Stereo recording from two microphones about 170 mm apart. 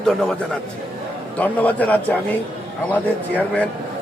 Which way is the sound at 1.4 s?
10° left (ahead or behind).